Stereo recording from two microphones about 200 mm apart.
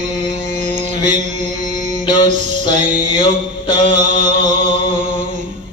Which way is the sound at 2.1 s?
20° left (ahead or behind).